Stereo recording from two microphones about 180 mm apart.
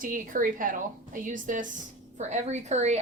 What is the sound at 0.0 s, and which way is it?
A woman's voice, 50° right (ahead or behind).